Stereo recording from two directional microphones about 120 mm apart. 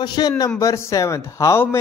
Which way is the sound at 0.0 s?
35° left (ahead or behind).